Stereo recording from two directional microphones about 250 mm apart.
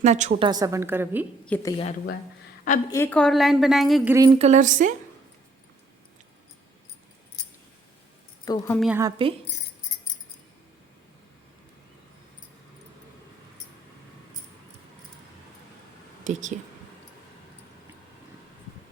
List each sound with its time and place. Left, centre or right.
0.0 s a woman's voice: right; by 1.3 s centre
1.5 s a woman's voice: centre
2.9 s a woman's voice: centre
4.3 s a woman's voice: right
8.4 s a woman's voice: centre
8.8 s a woman's voice: centre
16.2 s speech: right